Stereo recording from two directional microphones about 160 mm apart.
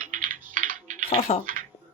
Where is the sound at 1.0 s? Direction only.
40° left (ahead or behind).